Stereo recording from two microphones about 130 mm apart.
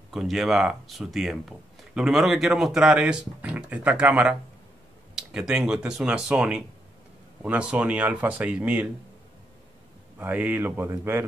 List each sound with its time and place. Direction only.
0.1 s speech: centre (ahead or behind)
10.1 s speech: 10° right (ahead or behind)